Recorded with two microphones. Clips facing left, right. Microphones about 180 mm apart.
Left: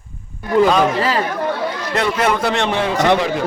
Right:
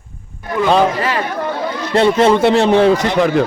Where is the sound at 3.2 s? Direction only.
50° right (ahead or behind).